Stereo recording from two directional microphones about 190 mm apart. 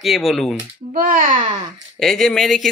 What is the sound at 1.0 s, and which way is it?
Speech, 45° right (ahead or behind).